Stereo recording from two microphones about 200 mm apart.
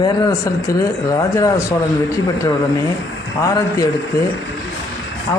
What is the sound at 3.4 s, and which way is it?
Speech, 15° left (ahead or behind).